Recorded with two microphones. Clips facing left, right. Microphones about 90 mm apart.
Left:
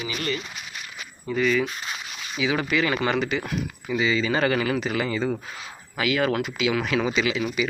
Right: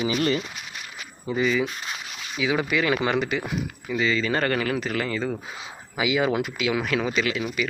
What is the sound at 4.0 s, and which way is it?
Speech, 5° left (ahead or behind).